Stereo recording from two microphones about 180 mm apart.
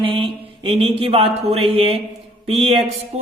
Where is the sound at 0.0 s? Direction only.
30° right (ahead or behind).